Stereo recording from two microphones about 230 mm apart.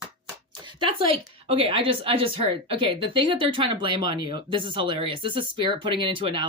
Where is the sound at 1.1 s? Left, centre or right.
Right.